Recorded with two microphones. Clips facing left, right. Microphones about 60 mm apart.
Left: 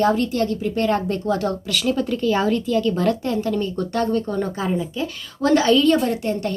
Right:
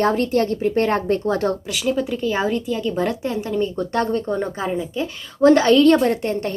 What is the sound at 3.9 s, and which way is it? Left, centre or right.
A woman's voice, right.